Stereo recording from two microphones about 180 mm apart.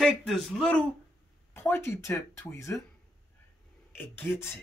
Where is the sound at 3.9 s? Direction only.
10° left (ahead or behind).